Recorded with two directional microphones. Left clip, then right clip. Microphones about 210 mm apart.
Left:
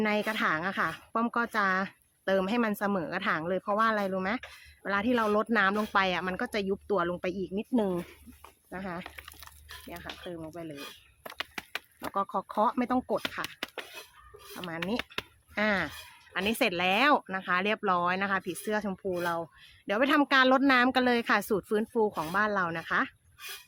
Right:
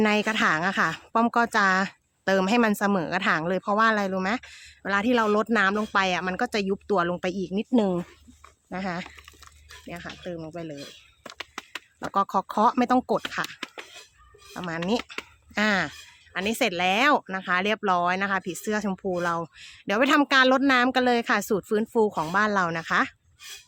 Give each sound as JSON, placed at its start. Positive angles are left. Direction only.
{"t": 0.0, "sound": "speech", "side_deg": -40}
{"t": 11.2, "sound": "a sound", "side_deg": -10}
{"t": 12.1, "sound": "speech", "side_deg": -45}
{"t": 14.5, "sound": "speech", "side_deg": -45}
{"t": 16.3, "sound": "speech", "side_deg": -20}